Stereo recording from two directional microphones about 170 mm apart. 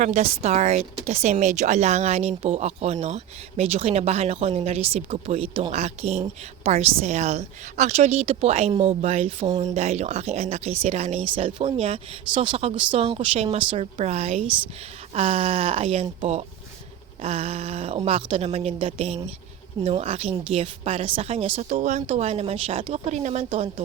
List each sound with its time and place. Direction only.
0.0 s speech: 40° right (ahead or behind)